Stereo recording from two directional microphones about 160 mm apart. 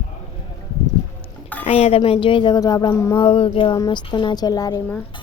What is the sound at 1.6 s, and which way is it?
Speech, 40° left (ahead or behind).